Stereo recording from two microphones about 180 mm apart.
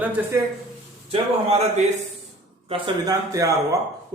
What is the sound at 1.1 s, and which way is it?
Speech, 35° right (ahead or behind).